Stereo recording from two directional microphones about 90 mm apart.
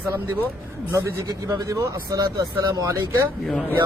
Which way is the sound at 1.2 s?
45° right (ahead or behind).